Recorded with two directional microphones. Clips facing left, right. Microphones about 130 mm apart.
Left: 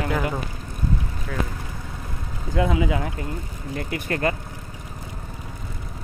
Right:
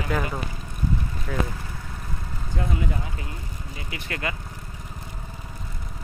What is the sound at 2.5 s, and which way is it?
Speech, 90° left.